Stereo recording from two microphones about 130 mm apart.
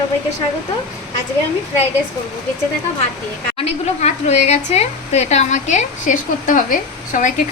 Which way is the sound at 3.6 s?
55° left (ahead or behind).